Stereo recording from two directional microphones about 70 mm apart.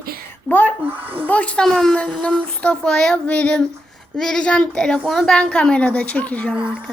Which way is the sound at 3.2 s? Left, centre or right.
Centre.